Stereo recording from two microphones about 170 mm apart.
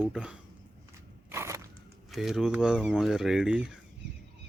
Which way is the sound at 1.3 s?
15° right (ahead or behind).